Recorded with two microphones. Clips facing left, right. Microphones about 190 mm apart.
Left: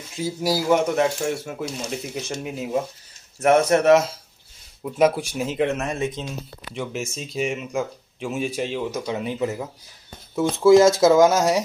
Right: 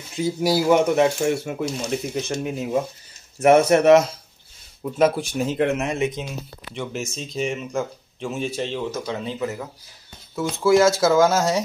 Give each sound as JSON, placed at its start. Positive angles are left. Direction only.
{"t": 0.2, "sound": "speech", "side_deg": 0}
{"t": 5.7, "sound": "speech", "side_deg": -20}
{"t": 6.7, "sound": "speech", "side_deg": 5}